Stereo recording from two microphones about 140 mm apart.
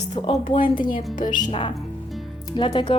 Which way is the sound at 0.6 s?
70° left (ahead or behind).